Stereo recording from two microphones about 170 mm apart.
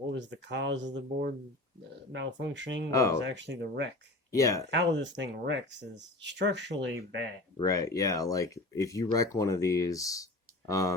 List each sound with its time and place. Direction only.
0.1 s speech: 90° right
2.9 s speech: 20° left (ahead or behind)
3.3 s speech: 90° right
4.3 s speech: 20° left (ahead or behind)
4.7 s speech: 90° right
7.5 s speech: 20° left (ahead or behind)